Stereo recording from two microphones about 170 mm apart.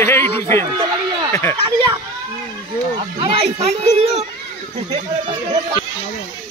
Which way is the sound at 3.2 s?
35° right (ahead or behind).